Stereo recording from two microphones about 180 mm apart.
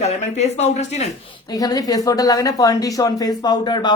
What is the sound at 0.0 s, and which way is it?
Speech, 40° left (ahead or behind).